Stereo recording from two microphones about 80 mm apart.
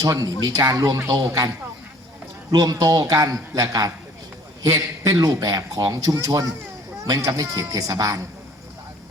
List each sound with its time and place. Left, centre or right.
0.0 s speech: right
2.5 s a man's voice: right